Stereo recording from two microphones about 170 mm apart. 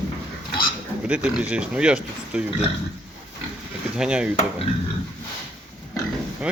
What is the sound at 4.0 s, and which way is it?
Speech, 5° right (ahead or behind).